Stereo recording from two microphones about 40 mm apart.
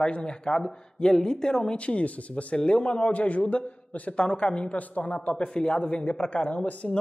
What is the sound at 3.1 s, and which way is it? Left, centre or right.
Speech, left.